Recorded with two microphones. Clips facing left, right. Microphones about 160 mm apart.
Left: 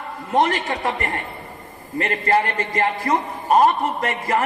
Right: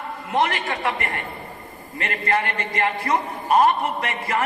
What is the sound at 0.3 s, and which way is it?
A man's voice, 40° left (ahead or behind).